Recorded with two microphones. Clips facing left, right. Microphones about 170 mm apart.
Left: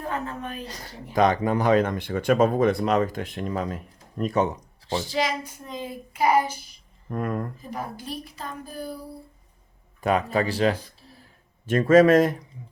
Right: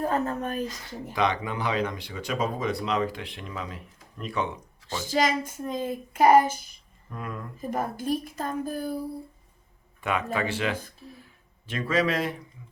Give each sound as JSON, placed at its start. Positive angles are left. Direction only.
{"t": 0.0, "sound": "child singing", "side_deg": -40}
{"t": 0.7, "sound": "speech", "side_deg": 40}
{"t": 5.0, "sound": "child singing", "side_deg": -45}
{"t": 7.1, "sound": "speech", "side_deg": 50}
{"t": 7.6, "sound": "child singing", "side_deg": -50}
{"t": 10.0, "sound": "a man's voice", "side_deg": 40}
{"t": 11.6, "sound": "speech", "side_deg": 45}